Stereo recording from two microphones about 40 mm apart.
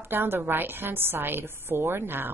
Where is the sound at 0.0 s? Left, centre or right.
Right.